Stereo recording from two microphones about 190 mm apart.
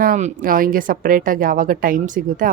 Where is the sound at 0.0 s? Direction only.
40° right (ahead or behind).